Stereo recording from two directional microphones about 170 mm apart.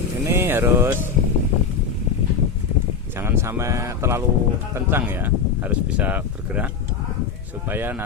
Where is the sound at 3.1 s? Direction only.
15° right (ahead or behind).